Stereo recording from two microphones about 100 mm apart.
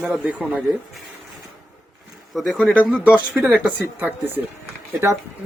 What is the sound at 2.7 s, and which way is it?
Speech, 10° right (ahead or behind).